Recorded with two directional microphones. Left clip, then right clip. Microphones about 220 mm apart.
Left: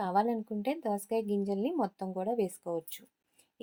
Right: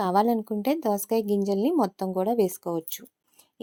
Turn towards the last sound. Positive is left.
turn(degrees=-35)  # may be behind; listen again after turning